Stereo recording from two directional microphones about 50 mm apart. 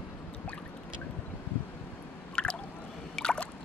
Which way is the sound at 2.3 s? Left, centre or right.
Centre.